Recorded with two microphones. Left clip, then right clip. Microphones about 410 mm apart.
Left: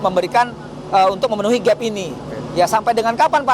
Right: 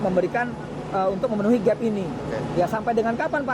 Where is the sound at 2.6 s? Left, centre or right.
Left.